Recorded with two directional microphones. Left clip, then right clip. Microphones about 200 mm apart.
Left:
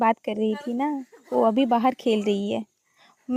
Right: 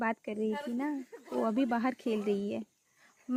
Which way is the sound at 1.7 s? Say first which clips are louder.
Left 11 dB; 35° left (ahead or behind).